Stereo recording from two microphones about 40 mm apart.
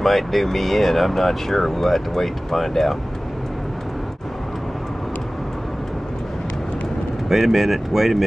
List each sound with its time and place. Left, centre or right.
0.0 s speech: centre
7.2 s speech: centre